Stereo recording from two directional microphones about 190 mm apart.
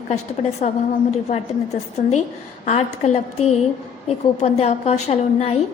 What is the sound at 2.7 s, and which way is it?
Speech, 35° left (ahead or behind).